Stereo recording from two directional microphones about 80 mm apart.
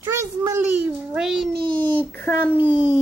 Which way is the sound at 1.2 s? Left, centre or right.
Centre.